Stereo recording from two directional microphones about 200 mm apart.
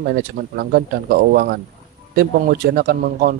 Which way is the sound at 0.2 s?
50° right (ahead or behind).